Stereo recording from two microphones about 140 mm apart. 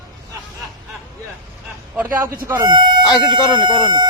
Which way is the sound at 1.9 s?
15° right (ahead or behind).